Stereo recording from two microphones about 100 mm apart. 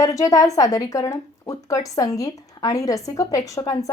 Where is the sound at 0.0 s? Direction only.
35° left (ahead or behind).